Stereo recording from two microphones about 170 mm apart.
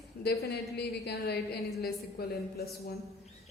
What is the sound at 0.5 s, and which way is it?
A woman's voice, 75° left (ahead or behind).